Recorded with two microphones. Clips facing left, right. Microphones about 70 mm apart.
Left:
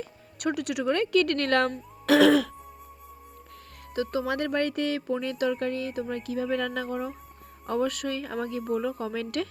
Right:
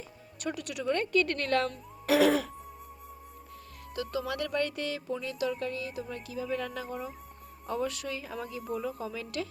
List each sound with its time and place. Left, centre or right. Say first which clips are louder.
0.3 s speech: left 7 dB; left
2.0 s throat clearing: left 5 dB; left
3.9 s speech: left 5 dB; left